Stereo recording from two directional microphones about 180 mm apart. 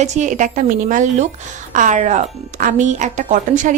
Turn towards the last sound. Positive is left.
turn(degrees=-45)  # may be behind; listen again after turning